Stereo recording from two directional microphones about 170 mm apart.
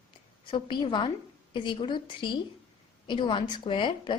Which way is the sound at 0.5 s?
30° left (ahead or behind).